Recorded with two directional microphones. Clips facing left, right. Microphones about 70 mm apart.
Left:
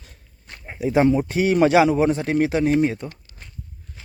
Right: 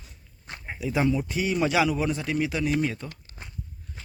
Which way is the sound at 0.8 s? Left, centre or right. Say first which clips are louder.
Left 8 dB; left.